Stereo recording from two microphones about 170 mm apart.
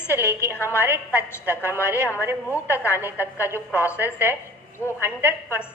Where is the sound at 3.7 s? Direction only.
15° left (ahead or behind).